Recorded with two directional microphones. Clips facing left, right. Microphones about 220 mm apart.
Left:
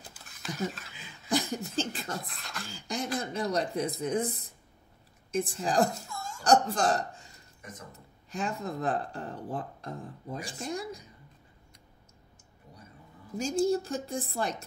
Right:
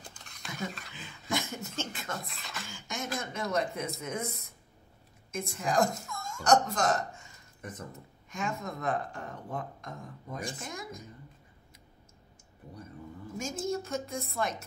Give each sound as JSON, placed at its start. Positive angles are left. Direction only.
{"t": 0.1, "sound": "a sound", "side_deg": 5}
{"t": 0.6, "sound": "speech", "side_deg": 0}
{"t": 1.8, "sound": "speech", "side_deg": 30}
{"t": 2.2, "sound": "beatboxing", "side_deg": 0}
{"t": 2.7, "sound": "speech", "side_deg": 35}
{"t": 13.4, "sound": "speech", "side_deg": 30}